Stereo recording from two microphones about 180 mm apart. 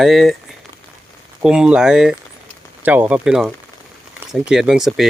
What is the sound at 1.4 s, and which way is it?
Speech, 5° right (ahead or behind).